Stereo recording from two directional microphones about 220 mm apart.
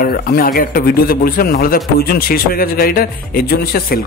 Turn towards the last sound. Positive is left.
turn(degrees=45)  # may be behind; listen again after turning